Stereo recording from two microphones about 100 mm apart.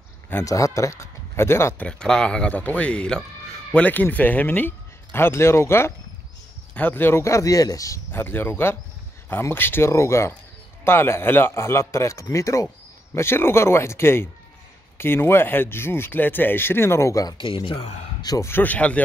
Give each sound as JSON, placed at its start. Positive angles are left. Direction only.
{"t": 0.5, "sound": "speech", "side_deg": 35}
{"t": 1.9, "sound": "speech", "side_deg": 10}
{"t": 8.1, "sound": "speech", "side_deg": 20}
{"t": 17.4, "sound": "speech", "side_deg": 55}
{"t": 18.4, "sound": "speech", "side_deg": 20}